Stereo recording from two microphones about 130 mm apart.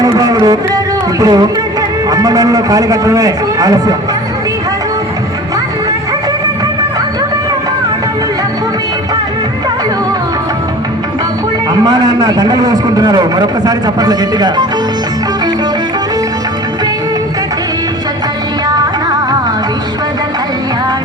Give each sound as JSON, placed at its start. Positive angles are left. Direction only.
{"t": 0.0, "sound": "music", "side_deg": -30}
{"t": 1.2, "sound": "a man's voice", "side_deg": -30}
{"t": 11.7, "sound": "a man's voice", "side_deg": -30}